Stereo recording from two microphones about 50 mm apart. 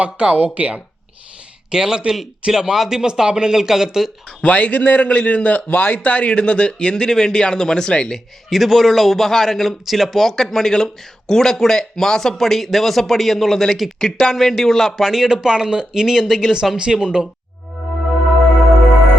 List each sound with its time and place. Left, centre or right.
0.0 s speech: right
1.7 s speech: centre
4.4 s a man's voice: left
8.4 s a man's voice: centre